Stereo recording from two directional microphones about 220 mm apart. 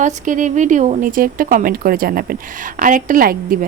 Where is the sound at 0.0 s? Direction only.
35° right (ahead or behind).